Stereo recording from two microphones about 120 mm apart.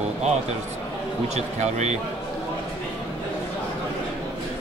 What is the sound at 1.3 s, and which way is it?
Speech, 70° right (ahead or behind).